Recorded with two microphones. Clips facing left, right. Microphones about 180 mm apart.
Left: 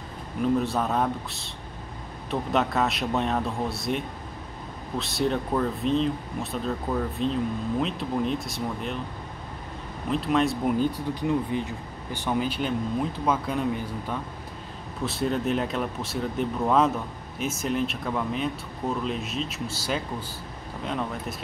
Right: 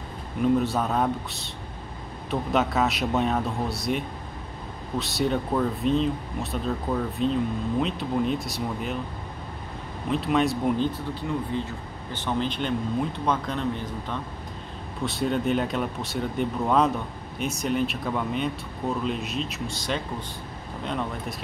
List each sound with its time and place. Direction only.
0.4 s speech: centre (ahead or behind)
2.5 s speech: centre (ahead or behind)
10.1 s speech: centre (ahead or behind)
10.9 s speech: 15° left (ahead or behind)